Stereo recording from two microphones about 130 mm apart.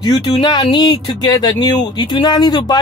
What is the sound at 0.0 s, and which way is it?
Speech, 30° left (ahead or behind).